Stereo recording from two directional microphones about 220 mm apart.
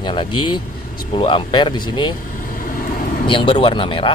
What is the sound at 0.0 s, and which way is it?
Speech, 25° left (ahead or behind).